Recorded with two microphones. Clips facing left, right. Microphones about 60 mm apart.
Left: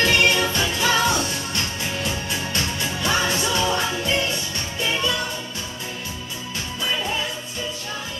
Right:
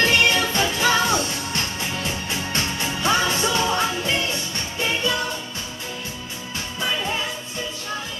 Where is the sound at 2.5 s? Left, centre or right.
Right.